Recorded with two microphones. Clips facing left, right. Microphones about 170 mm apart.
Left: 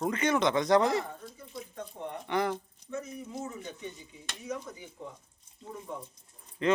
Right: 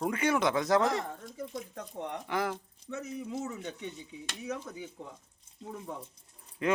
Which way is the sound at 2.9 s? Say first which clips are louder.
Right 1 dB; 75° right (ahead or behind).